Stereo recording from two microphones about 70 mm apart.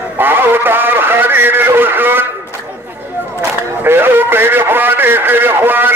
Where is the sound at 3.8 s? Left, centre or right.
Right.